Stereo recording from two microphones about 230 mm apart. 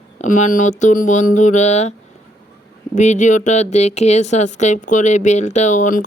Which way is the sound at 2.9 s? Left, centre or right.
Left.